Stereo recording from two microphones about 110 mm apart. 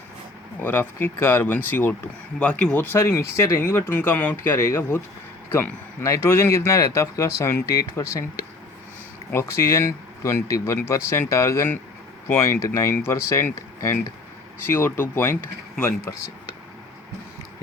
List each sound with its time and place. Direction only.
0.6 s speech: 15° left (ahead or behind)
9.3 s speech: 25° left (ahead or behind)